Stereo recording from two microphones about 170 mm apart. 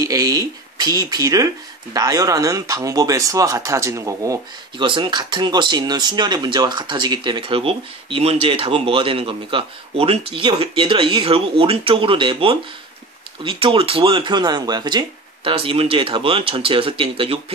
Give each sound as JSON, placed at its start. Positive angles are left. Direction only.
{"t": 0.0, "sound": "speech", "side_deg": -20}